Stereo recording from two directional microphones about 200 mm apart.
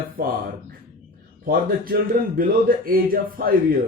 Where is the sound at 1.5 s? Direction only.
45° right (ahead or behind).